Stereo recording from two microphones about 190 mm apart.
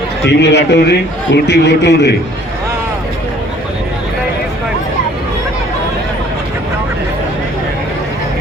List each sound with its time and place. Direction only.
0.3 s a man's voice: 65° left (ahead or behind)